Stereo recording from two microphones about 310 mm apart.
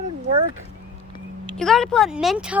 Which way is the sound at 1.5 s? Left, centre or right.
Centre.